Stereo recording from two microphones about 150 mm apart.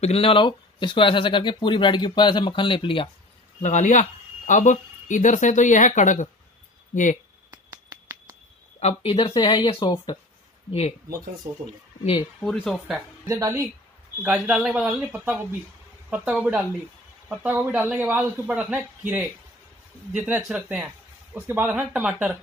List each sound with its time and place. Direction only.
0.0 s speech: 40° left (ahead or behind)
3.6 s speech: 55° left (ahead or behind)
7.5 s a sound: 20° right (ahead or behind)
8.7 s speech: 40° left (ahead or behind)
10.7 s speech: 40° left (ahead or behind)
12.5 s speech: centre (ahead or behind)
13.3 s speech: 25° right (ahead or behind)
14.2 s speech: 5° right (ahead or behind)